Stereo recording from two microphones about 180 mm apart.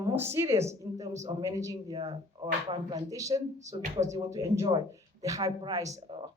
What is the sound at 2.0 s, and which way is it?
Speech, 30° right (ahead or behind).